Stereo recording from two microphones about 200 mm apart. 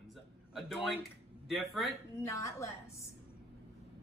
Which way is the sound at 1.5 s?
Centre (ahead or behind).